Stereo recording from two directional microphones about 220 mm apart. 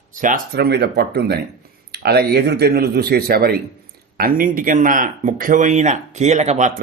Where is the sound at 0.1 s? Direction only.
35° right (ahead or behind).